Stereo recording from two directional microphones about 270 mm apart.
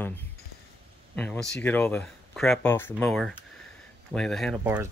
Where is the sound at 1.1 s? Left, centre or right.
Centre.